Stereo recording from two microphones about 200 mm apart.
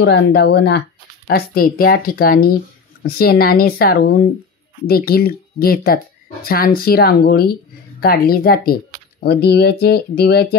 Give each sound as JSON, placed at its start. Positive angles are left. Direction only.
{"t": 0.0, "sound": "speech", "side_deg": 55}